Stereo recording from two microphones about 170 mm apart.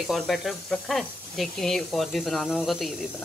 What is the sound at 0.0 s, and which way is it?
Speech, centre (ahead or behind).